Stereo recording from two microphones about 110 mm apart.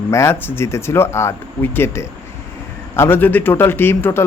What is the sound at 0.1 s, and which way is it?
A man's voice, 25° left (ahead or behind).